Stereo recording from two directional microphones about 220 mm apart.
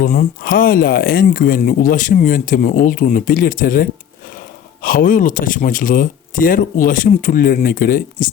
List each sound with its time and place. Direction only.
0.0 s speech: 40° left (ahead or behind)